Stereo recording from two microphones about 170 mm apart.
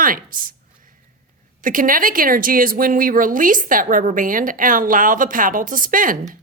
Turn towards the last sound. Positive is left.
turn(degrees=-55)  # may be behind; listen again after turning